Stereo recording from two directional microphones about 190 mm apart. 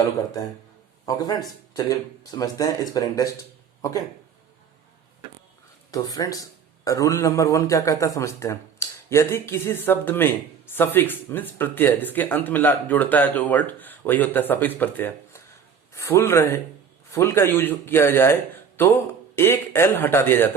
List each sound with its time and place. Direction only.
1.0 s a man's voice: 20° left (ahead or behind)
5.9 s a man's voice: 20° left (ahead or behind)
19.4 s a man's voice: 10° left (ahead or behind)